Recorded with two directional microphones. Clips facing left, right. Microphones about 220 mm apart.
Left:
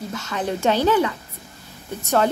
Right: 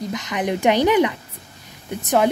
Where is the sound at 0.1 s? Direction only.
15° right (ahead or behind).